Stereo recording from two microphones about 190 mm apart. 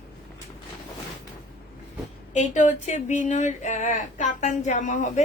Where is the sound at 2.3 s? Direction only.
40° left (ahead or behind).